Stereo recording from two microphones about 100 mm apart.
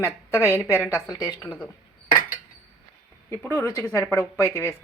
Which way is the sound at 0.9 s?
40° left (ahead or behind).